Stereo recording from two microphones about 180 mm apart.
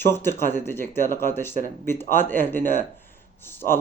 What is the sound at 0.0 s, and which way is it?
A man's voice, 10° left (ahead or behind).